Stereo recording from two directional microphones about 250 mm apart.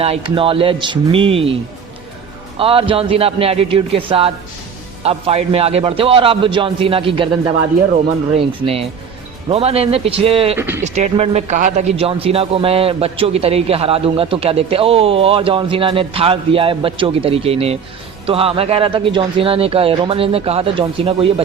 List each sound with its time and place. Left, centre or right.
0.0 s a man's voice: right
2.6 s a man's voice: right